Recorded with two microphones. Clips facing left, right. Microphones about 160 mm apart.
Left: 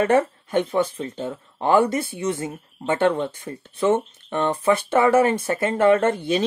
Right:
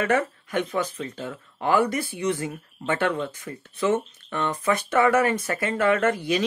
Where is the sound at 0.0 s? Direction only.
30° left (ahead or behind).